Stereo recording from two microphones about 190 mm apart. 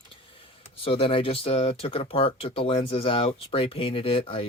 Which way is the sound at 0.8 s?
30° left (ahead or behind).